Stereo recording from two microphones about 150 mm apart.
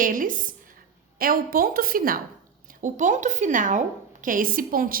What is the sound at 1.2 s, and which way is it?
A woman's voice, 75° right (ahead or behind).